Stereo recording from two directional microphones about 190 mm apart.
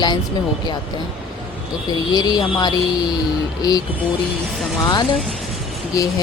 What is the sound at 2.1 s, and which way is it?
Speech, 20° left (ahead or behind).